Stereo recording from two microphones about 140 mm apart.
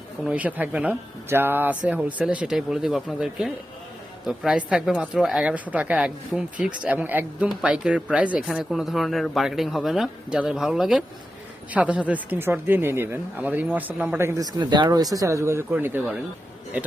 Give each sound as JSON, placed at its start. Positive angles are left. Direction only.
{"t": 0.3, "sound": "speech", "side_deg": -10}